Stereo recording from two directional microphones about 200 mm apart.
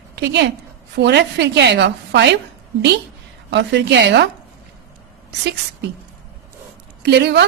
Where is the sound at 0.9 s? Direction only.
60° right (ahead or behind).